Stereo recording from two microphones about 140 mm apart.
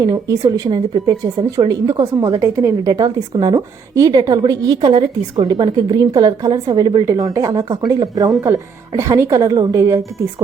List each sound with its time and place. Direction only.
0.0 s a woman's voice: 25° right (ahead or behind)